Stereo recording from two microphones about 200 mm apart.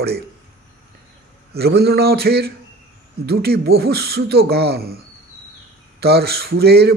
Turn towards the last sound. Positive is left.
turn(degrees=-55)  # may be behind; listen again after turning